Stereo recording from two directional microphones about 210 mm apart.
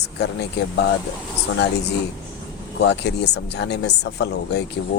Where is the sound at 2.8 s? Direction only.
55° left (ahead or behind).